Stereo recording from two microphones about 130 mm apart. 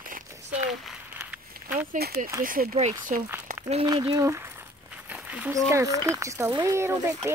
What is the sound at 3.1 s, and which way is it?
Speech, 80° right.